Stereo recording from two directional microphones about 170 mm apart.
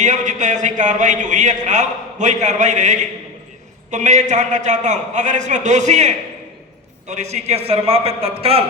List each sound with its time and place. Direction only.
0.0 s a man's voice: 45° right (ahead or behind)